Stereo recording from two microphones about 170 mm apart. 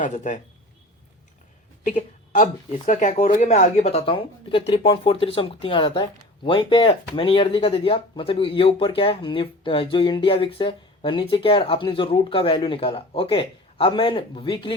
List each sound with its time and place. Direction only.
0.0 s speech: 45° left (ahead or behind)
1.8 s speech: 45° left (ahead or behind); by 14.7 s 30° left (ahead or behind)